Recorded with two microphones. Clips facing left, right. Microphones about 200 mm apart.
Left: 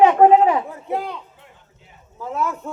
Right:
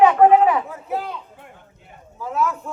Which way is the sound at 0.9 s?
Centre (ahead or behind).